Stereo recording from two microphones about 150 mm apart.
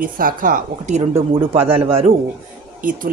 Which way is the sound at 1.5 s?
40° right (ahead or behind).